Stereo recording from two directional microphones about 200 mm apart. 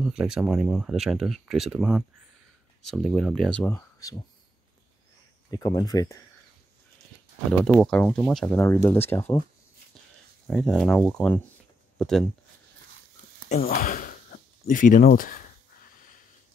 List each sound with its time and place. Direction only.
0.0 s speech: 5° right (ahead or behind); by 4.2 s 10° left (ahead or behind)
5.5 s speech: 20° left (ahead or behind)
7.6 s speech: centre (ahead or behind)
10.4 s speech: centre (ahead or behind)
13.5 s speech: 40° left (ahead or behind)